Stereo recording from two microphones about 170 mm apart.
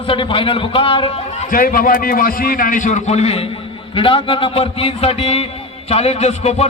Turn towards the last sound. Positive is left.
turn(degrees=40)  # may be behind; listen again after turning